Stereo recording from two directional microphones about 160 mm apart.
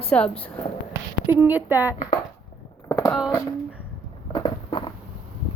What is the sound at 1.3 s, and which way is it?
Speech, 10° right (ahead or behind).